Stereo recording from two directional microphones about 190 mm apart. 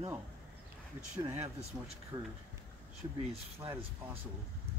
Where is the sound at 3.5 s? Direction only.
10° right (ahead or behind).